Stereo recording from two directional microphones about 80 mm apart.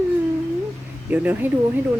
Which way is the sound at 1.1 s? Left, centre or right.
Right.